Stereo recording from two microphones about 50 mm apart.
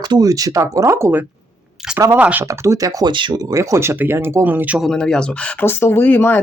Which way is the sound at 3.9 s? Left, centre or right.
Right.